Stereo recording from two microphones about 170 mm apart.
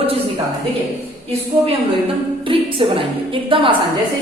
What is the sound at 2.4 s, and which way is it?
A woman's voice, 30° right (ahead or behind).